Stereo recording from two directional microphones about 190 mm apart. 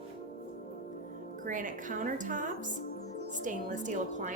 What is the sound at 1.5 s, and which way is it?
A woman's voice, 45° right (ahead or behind).